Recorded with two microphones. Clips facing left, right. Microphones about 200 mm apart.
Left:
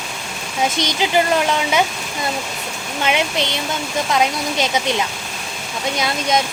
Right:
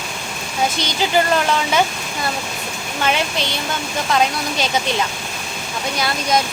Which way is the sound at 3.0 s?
20° left (ahead or behind).